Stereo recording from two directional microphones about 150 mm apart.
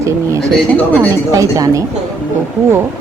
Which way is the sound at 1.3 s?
20° right (ahead or behind).